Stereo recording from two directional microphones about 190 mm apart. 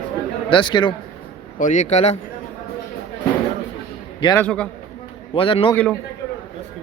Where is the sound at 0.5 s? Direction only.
25° left (ahead or behind).